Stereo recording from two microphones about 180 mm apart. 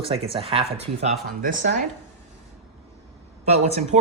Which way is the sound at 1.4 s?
50° right (ahead or behind).